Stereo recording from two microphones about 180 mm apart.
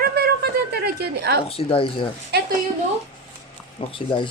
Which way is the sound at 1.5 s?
30° left (ahead or behind).